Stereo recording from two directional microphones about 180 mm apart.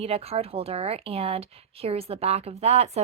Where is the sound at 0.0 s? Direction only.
35° right (ahead or behind).